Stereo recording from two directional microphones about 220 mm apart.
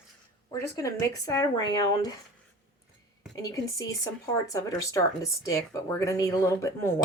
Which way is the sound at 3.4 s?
15° left (ahead or behind).